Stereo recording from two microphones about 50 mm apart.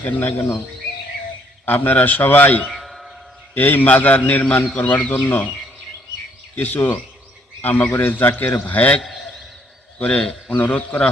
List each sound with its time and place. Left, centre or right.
0.1 s a man's voice: left
1.6 s a man's voice: left
2.6 s a sound: centre
3.5 s a man's voice: left
6.6 s a man's voice: left
9.0 s a sound: centre
10.0 s a man's voice: left